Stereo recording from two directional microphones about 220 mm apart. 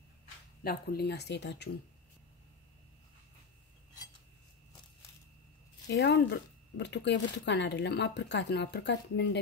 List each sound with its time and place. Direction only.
0.7 s speech: 45° left (ahead or behind)
5.9 s speech: 50° left (ahead or behind)